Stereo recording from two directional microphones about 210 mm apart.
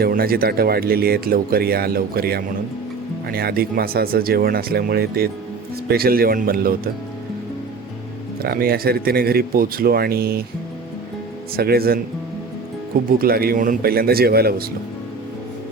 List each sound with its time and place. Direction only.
0.0 s speech: 45° right (ahead or behind)
8.4 s speech: 45° right (ahead or behind)
11.5 s speech: 45° right (ahead or behind)
13.1 s speech: 45° right (ahead or behind)